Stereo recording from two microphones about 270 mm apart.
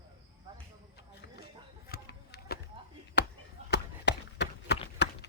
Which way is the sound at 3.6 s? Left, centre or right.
Left.